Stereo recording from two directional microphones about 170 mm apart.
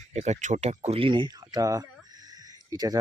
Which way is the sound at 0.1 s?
40° right (ahead or behind).